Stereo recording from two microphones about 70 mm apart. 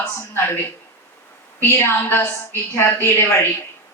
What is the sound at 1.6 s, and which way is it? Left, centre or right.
A woman's voice, left.